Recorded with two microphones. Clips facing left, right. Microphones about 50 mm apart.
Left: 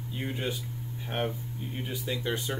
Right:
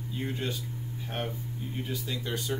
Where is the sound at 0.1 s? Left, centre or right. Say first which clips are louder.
Even; centre.